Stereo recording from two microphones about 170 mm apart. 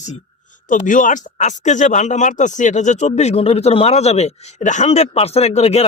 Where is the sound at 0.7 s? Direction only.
50° left (ahead or behind).